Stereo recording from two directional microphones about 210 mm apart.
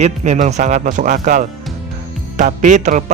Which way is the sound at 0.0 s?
35° right (ahead or behind).